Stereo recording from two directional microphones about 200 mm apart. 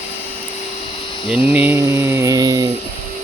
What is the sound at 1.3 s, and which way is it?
Mantra, 5° right (ahead or behind).